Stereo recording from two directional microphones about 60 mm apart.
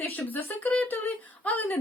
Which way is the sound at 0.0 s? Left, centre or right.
Left.